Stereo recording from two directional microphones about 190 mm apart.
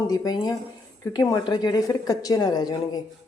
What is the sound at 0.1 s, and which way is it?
Speech, 20° left (ahead or behind).